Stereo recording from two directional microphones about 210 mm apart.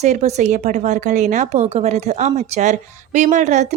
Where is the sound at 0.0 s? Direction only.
35° right (ahead or behind).